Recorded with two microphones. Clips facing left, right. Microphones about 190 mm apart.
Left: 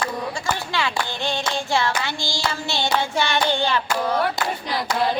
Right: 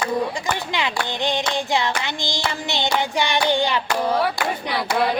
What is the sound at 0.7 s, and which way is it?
Clapping, 20° right (ahead or behind).